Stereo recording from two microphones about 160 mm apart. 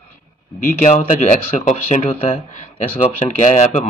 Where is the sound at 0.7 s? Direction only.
50° left (ahead or behind).